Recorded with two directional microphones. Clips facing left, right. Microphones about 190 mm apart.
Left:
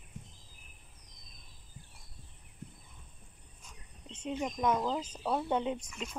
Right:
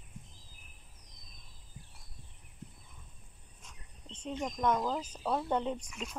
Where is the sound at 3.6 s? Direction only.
10° left (ahead or behind).